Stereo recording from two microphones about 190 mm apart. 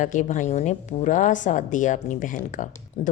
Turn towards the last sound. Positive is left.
turn(degrees=35)  # may be behind; listen again after turning